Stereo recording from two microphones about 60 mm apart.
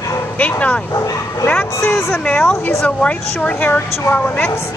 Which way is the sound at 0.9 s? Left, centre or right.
Left.